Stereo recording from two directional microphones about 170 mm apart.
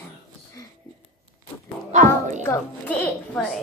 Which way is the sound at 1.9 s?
45° right (ahead or behind).